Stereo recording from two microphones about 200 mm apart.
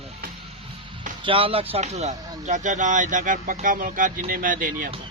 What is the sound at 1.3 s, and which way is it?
Speech, 25° right (ahead or behind).